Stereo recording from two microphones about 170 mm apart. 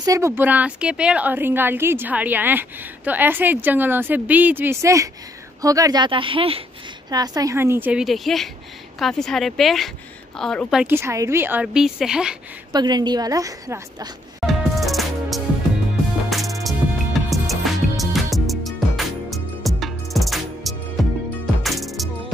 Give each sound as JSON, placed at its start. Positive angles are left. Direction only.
{"t": 0.0, "sound": "a woman's voice", "side_deg": -20}
{"t": 7.1, "sound": "a woman's voice", "side_deg": -20}
{"t": 12.7, "sound": "a woman's voice", "side_deg": -25}
{"t": 14.4, "sound": "music", "side_deg": 0}